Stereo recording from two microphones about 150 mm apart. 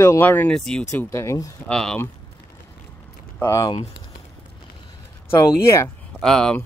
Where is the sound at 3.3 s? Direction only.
20° left (ahead or behind).